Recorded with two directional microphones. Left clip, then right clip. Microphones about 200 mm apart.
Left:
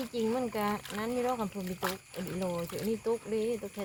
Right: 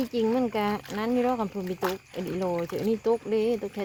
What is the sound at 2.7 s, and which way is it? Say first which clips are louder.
Speech: right 7 dB; 50° right (ahead or behind).